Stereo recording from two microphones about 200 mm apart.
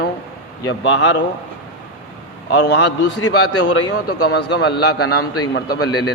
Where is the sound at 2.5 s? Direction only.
55° left (ahead or behind).